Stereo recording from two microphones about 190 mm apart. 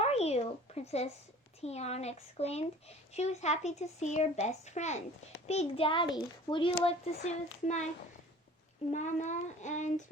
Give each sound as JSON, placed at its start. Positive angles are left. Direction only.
{"t": 0.0, "sound": "a sound", "side_deg": 35}
{"t": 1.6, "sound": "a child's voice", "side_deg": 35}
{"t": 7.2, "sound": "speech", "side_deg": 40}
{"t": 8.9, "sound": "speech", "side_deg": 40}